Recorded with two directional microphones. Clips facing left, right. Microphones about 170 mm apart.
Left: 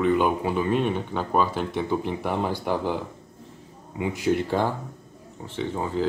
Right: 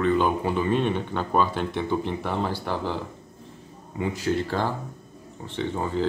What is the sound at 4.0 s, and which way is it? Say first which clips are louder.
Speech: left 2 dB; 15° left (ahead or behind).